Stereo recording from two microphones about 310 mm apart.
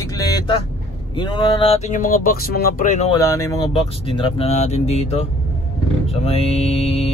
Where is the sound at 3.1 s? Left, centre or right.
Centre.